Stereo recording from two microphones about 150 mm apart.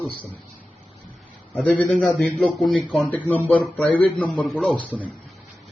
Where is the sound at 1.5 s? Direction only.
10° left (ahead or behind).